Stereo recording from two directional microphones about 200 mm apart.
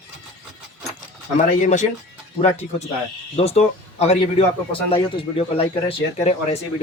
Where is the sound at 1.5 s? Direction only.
40° left (ahead or behind).